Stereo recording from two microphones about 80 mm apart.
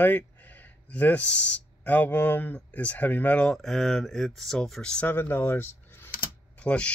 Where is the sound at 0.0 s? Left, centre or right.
Left.